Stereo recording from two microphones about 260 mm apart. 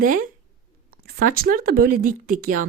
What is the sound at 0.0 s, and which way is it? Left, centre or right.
A woman's voice, right.